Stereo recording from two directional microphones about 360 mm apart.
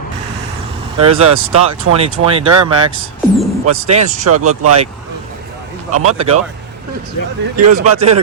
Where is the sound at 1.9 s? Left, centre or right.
Centre.